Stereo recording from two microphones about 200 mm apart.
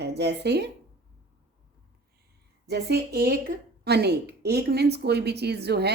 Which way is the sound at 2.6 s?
55° right (ahead or behind).